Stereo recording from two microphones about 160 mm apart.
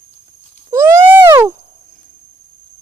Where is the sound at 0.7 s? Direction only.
20° right (ahead or behind).